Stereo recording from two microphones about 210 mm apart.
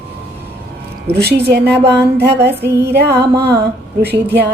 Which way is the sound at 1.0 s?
50° right (ahead or behind).